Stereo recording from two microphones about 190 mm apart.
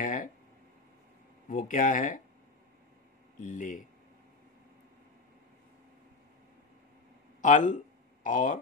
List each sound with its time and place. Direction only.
0.0 s a sound: 45° left (ahead or behind)
1.5 s speech: 45° left (ahead or behind)
3.3 s speech: 45° left (ahead or behind)
7.4 s speech: 40° left (ahead or behind)